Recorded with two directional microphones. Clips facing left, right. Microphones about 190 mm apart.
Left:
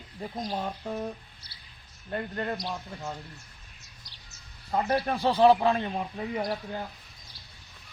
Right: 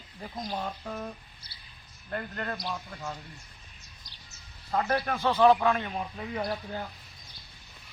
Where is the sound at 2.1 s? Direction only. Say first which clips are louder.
Left 3 dB; 20° left (ahead or behind).